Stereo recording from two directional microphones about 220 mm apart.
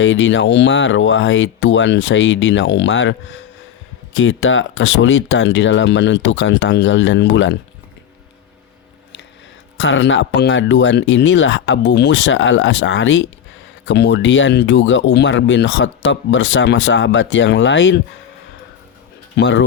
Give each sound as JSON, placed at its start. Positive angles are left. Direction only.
{"t": 0.0, "sound": "speech", "side_deg": 60}
{"t": 9.7, "sound": "speech", "side_deg": 60}
{"t": 19.4, "sound": "speech", "side_deg": 55}